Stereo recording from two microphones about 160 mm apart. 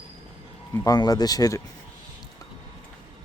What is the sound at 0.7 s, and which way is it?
Speech, 25° left (ahead or behind).